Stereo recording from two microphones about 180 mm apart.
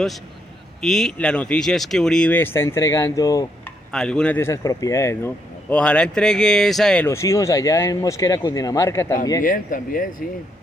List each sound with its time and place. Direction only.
0.8 s speech: centre (ahead or behind); by 3.4 s 20° left (ahead or behind)
3.9 s speech: 5° left (ahead or behind)
9.4 s speech: 45° left (ahead or behind)